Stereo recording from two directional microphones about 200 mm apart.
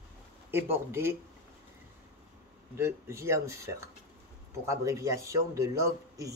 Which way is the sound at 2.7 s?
15° right (ahead or behind).